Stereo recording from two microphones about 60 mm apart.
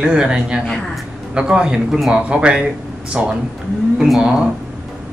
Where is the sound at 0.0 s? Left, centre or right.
Centre.